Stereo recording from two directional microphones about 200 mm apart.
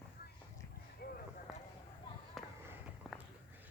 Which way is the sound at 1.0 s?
50° left (ahead or behind).